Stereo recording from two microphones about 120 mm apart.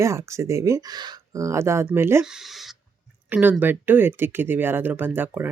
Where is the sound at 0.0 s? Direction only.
25° right (ahead or behind).